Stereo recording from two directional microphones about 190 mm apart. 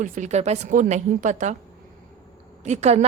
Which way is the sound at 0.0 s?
40° right (ahead or behind).